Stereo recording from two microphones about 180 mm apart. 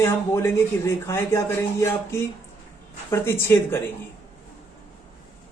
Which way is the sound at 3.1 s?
15° left (ahead or behind).